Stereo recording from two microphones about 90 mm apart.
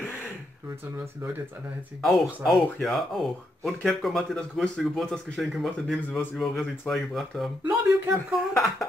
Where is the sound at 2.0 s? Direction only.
Centre (ahead or behind).